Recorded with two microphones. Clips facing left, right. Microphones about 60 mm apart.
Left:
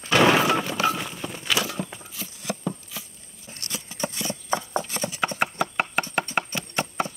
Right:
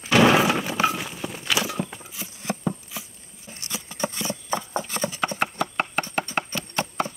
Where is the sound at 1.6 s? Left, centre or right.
Centre.